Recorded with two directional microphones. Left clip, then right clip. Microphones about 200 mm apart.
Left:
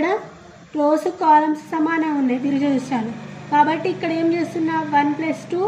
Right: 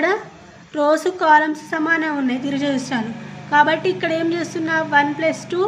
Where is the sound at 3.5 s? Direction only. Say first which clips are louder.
Right 2 dB; 40° right (ahead or behind).